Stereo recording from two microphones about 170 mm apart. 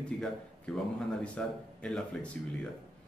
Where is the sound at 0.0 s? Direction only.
5° left (ahead or behind).